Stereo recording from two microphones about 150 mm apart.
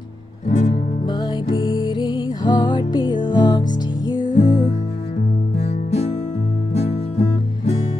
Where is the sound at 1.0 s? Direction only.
30° left (ahead or behind).